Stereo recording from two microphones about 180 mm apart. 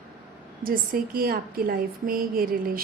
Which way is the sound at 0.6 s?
55° right (ahead or behind).